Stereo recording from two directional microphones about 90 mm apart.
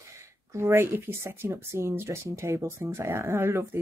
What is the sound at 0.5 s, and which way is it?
Speech, 30° right (ahead or behind).